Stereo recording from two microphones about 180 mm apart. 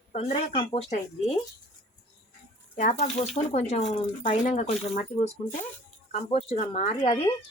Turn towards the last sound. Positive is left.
turn(degrees=30)  # may be behind; listen again after turning